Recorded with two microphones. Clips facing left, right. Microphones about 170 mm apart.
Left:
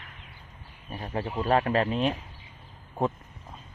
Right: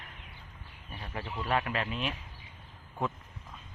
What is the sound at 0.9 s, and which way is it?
Speech, 40° left (ahead or behind).